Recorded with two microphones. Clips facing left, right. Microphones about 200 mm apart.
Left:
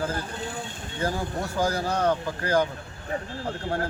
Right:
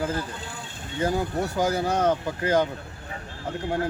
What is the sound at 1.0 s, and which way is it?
Speech, 20° right (ahead or behind).